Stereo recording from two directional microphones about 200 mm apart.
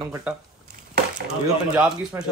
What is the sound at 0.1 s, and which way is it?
Speech, 5° right (ahead or behind).